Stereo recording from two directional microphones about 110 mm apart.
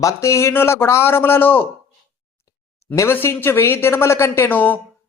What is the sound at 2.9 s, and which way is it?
A man's voice, 20° left (ahead or behind).